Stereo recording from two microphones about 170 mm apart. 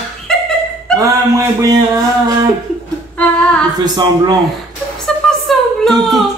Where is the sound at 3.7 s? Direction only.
25° right (ahead or behind).